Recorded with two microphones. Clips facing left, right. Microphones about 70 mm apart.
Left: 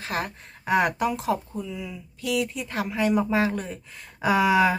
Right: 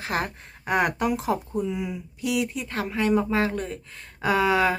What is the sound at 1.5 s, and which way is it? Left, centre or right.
Speech, right.